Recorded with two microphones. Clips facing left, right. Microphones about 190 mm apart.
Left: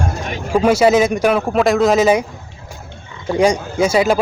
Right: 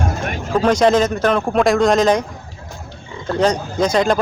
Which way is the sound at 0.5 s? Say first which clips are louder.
Left 2 dB; 10° left (ahead or behind).